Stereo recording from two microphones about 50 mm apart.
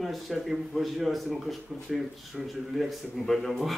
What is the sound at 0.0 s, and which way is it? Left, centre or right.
Speech, centre.